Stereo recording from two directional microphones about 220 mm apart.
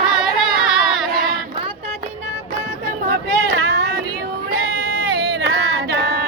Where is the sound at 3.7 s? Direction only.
50° right (ahead or behind).